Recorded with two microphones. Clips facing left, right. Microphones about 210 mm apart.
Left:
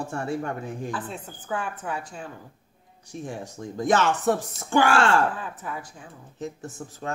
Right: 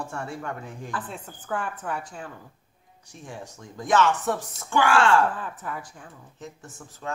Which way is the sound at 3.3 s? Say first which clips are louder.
Left 4 dB; 40° left (ahead or behind).